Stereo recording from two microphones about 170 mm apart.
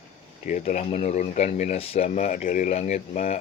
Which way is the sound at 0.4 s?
45° left (ahead or behind).